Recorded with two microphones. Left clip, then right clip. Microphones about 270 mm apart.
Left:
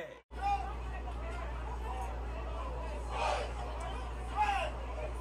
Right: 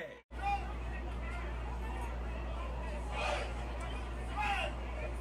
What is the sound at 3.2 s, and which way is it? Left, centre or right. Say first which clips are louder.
Hubbub: left 3 dB; centre.